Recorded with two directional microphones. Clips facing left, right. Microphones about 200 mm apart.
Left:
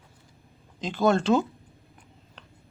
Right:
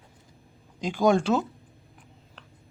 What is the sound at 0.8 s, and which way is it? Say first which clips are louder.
Speech: right 1 dB; 10° right (ahead or behind).